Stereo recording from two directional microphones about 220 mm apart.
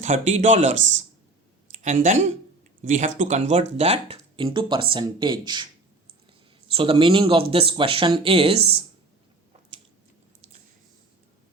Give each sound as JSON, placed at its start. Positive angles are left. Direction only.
{"t": 0.0, "sound": "speech", "side_deg": -30}
{"t": 6.7, "sound": "speech", "side_deg": -25}